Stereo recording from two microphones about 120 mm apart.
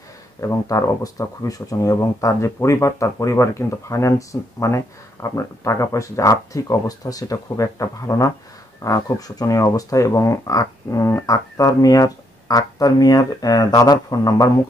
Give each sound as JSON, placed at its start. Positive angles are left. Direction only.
{"t": 0.4, "sound": "speech", "side_deg": 25}